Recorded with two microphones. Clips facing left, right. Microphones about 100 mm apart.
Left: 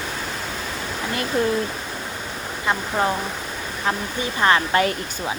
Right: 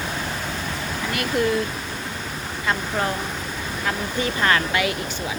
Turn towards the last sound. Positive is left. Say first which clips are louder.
# left 4 dB
turn(degrees=40)  # may be behind; listen again after turning